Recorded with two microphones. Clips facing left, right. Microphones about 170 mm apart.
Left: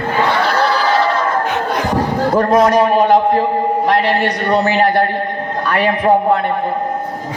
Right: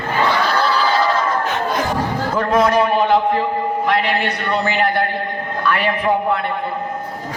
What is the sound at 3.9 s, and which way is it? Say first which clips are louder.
A man's voice: left 3 dB; 40° left (ahead or behind).